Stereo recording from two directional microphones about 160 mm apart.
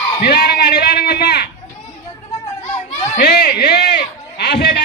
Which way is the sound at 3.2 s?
85° left.